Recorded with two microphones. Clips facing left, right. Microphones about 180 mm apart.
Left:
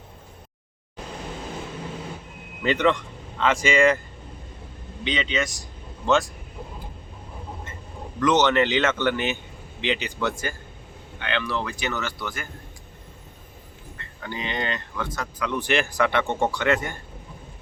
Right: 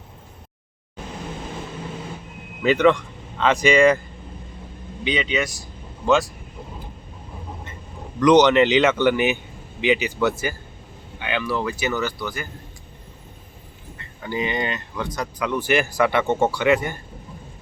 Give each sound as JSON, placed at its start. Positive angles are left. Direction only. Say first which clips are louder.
{"t": 2.6, "sound": "speech", "louder": "right 5 dB", "side_deg": -10}
{"t": 5.0, "sound": "speech", "louder": "right 3 dB", "side_deg": -10}
{"t": 8.2, "sound": "speech", "louder": "right 6 dB", "side_deg": -15}
{"t": 14.2, "sound": "speech", "louder": "right 5 dB", "side_deg": -10}